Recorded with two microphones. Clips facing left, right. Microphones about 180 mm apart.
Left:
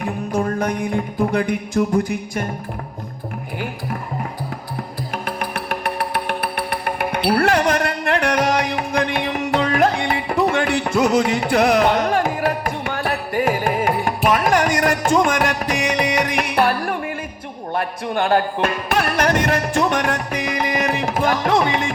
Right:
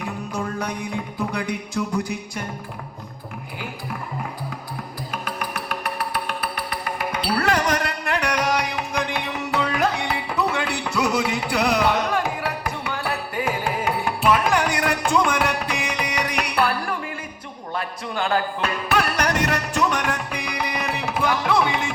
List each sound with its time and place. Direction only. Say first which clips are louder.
0.0 s music: left 6 dB; 55° left (ahead or behind)
5.1 s music: left 4 dB; 55° left (ahead or behind)